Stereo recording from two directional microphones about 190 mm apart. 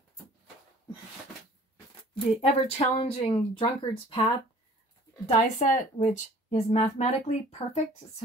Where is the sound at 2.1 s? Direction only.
35° left (ahead or behind).